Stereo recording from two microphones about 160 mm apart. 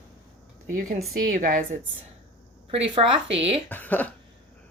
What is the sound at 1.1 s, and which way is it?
Speech, 55° right (ahead or behind).